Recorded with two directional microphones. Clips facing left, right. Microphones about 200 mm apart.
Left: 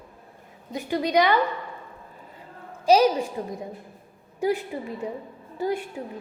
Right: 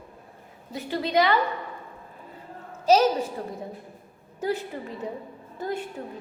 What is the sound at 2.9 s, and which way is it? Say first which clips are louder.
A woman's voice: left 1 dB; 10° left (ahead or behind).